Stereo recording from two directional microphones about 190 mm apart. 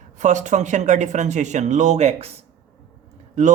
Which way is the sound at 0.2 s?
40° right (ahead or behind).